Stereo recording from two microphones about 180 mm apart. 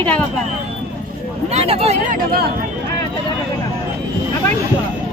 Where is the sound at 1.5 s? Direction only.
35° right (ahead or behind).